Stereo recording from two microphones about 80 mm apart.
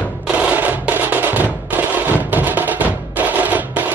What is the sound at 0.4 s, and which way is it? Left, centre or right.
Music, centre.